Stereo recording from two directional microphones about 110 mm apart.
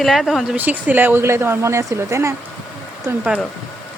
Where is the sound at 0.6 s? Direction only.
15° right (ahead or behind).